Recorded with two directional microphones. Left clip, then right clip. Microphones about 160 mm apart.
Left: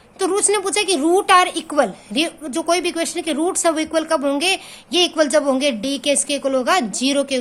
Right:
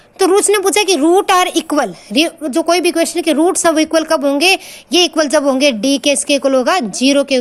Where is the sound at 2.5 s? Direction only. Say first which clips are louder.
Right 6 dB; 25° right (ahead or behind).